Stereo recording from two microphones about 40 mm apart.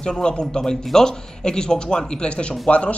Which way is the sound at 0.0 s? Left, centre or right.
Left.